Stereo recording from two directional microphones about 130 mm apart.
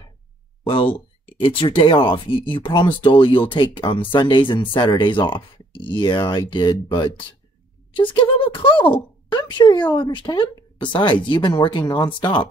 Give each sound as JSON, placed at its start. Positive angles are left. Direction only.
{"t": 0.7, "sound": "speech", "side_deg": 45}